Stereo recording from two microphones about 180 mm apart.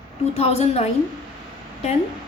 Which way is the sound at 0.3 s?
35° left (ahead or behind).